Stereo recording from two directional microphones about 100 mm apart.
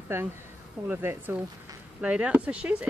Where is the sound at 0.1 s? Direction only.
20° right (ahead or behind).